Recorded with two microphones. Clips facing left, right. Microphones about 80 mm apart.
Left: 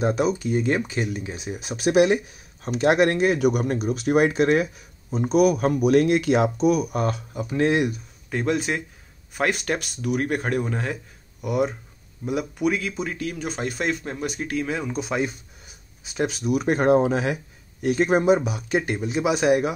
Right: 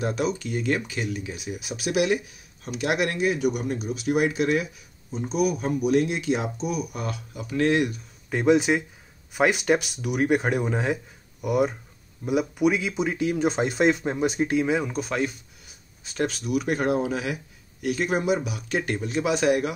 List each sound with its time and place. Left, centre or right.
0.0 s speech: left
5.1 s speech: left
7.3 s speech: left
8.3 s speech: centre
11.4 s speech: centre
14.7 s speech: centre
16.0 s speech: centre
16.5 s speech: left